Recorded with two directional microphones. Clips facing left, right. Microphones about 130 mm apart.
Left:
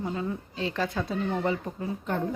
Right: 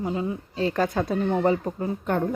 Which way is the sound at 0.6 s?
45° right (ahead or behind).